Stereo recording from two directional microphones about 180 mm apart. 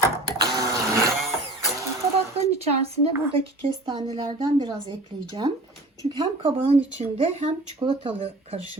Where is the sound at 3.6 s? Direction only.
25° right (ahead or behind).